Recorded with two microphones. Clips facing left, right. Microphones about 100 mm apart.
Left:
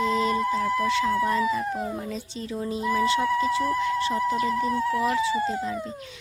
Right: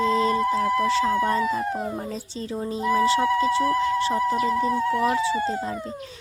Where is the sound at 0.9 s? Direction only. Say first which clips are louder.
Right 2 dB; 35° right (ahead or behind).